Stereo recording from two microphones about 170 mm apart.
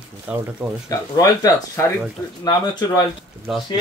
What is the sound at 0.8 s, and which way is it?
Speech, 20° left (ahead or behind).